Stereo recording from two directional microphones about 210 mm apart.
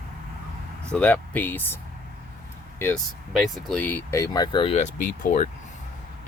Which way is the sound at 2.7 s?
5° left (ahead or behind).